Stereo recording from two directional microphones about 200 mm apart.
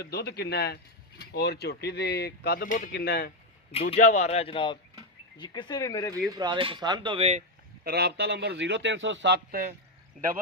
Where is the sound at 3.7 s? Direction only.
30° left (ahead or behind); by 6.2 s 15° left (ahead or behind).